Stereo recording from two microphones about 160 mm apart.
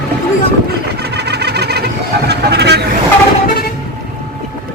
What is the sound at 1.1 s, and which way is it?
Vehicle, 90° right.